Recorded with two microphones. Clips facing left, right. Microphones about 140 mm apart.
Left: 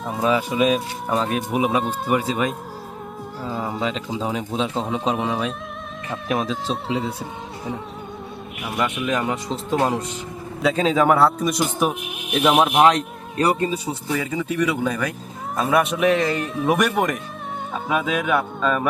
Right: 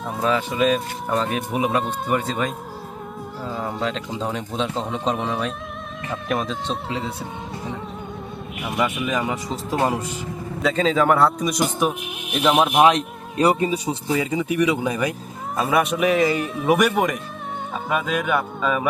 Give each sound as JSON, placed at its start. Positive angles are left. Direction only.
{"t": 0.0, "sound": "speech", "side_deg": 5}
{"t": 8.6, "sound": "speech", "side_deg": 0}
{"t": 12.9, "sound": "speech", "side_deg": -15}
{"t": 15.5, "sound": "speech", "side_deg": 0}